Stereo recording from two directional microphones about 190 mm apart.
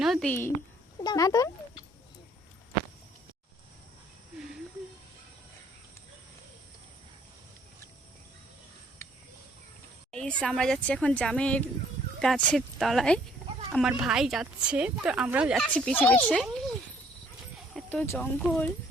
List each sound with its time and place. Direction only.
0.0 s a sound: centre (ahead or behind)
1.0 s speech: 20° left (ahead or behind)
10.1 s speech: 5° left (ahead or behind)
15.7 s speech: 5° left (ahead or behind)
17.7 s a sound: centre (ahead or behind)
18.2 s speech: 5° left (ahead or behind)